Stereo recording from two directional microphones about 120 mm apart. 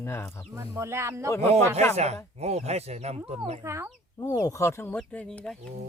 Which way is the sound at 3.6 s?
20° right (ahead or behind).